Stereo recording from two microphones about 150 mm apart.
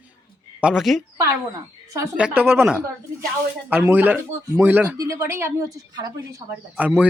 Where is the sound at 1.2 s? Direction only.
20° right (ahead or behind).